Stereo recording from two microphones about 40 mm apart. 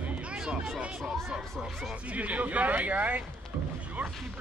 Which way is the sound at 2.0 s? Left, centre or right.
Right.